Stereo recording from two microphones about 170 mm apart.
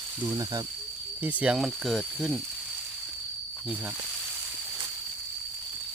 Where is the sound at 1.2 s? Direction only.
10° right (ahead or behind).